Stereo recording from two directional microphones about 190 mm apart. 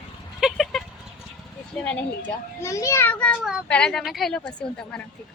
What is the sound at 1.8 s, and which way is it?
A child's voice, 5° left (ahead or behind).